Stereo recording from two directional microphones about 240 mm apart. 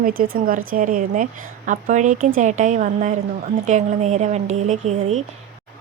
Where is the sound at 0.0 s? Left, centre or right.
Right.